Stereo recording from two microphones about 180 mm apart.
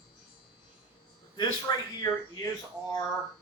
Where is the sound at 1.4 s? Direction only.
20° left (ahead or behind).